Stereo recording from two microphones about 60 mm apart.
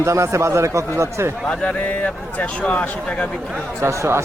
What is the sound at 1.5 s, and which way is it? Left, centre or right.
Speech, left.